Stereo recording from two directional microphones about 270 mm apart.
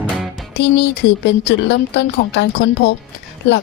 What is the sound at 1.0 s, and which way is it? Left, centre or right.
A woman's voice, left.